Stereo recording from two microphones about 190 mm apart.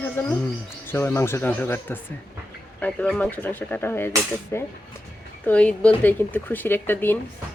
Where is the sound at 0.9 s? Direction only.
10° left (ahead or behind).